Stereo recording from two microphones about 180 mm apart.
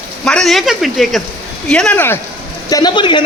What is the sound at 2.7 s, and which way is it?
Speech, 20° left (ahead or behind).